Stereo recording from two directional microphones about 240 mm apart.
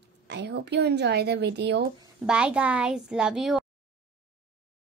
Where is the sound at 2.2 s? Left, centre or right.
Centre.